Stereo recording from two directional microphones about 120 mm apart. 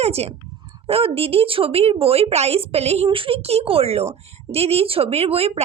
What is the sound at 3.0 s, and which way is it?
A woman's voice, 45° right (ahead or behind).